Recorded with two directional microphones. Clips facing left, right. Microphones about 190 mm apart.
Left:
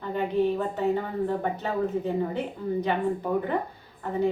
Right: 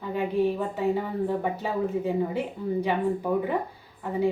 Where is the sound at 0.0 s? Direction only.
10° right (ahead or behind).